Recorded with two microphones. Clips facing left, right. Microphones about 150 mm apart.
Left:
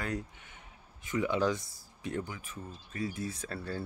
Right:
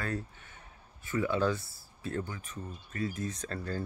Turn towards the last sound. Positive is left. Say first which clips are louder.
# right 2 dB
turn(degrees=10)  # may be behind; listen again after turning